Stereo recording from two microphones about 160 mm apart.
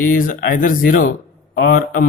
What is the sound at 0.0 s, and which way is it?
Speech, 60° left (ahead or behind).